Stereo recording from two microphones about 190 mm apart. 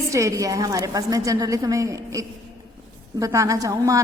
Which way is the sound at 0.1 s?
15° right (ahead or behind).